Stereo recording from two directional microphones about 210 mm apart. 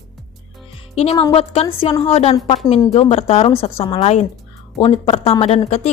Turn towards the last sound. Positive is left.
turn(degrees=30)  # may be behind; listen again after turning